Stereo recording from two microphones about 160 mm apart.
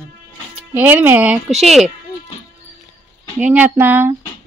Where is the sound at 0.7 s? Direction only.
10° right (ahead or behind).